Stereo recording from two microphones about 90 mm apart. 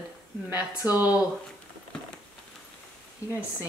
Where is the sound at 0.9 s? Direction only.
15° right (ahead or behind).